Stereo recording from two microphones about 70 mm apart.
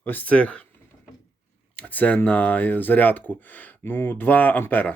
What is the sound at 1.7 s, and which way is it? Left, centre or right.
Speech, left.